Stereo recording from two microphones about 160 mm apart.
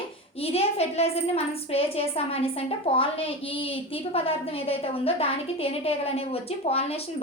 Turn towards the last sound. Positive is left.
turn(degrees=40)  # may be behind; listen again after turning